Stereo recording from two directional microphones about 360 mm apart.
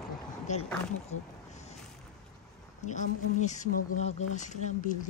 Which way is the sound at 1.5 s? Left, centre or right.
Centre.